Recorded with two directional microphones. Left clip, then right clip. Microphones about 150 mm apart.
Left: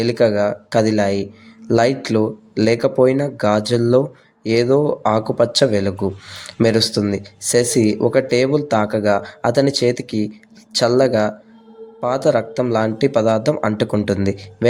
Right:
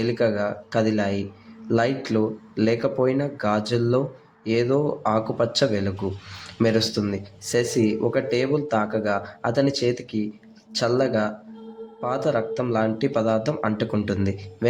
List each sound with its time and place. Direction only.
0.0 s speech: 35° left (ahead or behind)